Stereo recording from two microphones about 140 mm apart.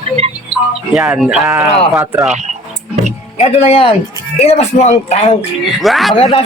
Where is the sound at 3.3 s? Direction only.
45° left (ahead or behind).